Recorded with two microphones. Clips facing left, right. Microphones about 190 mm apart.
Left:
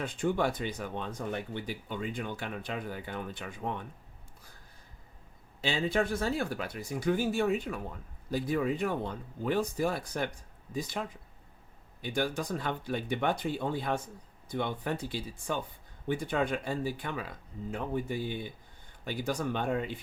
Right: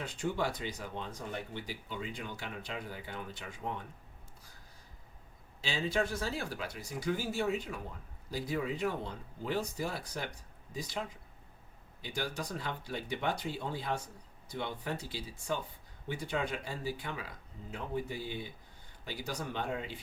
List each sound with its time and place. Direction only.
0.0 s speech: 55° left (ahead or behind)
5.6 s speech: 55° left (ahead or behind)
12.0 s speech: 55° left (ahead or behind)